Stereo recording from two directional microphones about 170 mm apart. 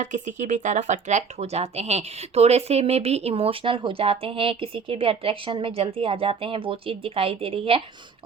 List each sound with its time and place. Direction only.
0.0 s speech: 45° right (ahead or behind)